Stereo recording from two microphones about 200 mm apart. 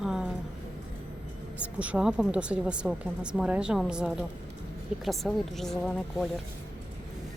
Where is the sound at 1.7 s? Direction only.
5° right (ahead or behind).